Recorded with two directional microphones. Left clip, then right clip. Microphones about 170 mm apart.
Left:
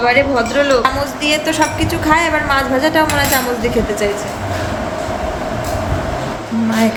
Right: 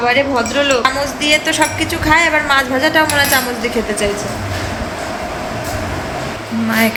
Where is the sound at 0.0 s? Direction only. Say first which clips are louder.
Left 1 dB; 5° right (ahead or behind).